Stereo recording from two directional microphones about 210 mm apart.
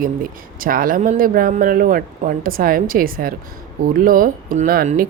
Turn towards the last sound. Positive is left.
turn(degrees=-45)  # may be behind; listen again after turning